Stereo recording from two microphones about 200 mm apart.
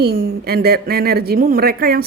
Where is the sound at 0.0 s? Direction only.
50° right (ahead or behind).